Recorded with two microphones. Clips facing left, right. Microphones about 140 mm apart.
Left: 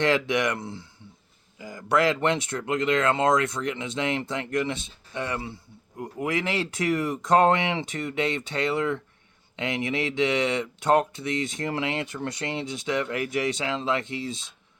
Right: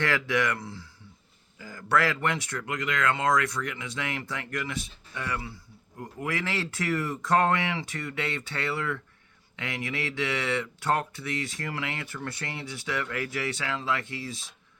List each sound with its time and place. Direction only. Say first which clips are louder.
0.0 s speech: left 4 dB; 20° left (ahead or behind)